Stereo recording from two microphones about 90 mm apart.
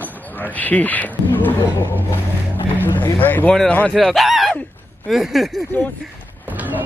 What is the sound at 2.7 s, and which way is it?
Speech, 20° left (ahead or behind).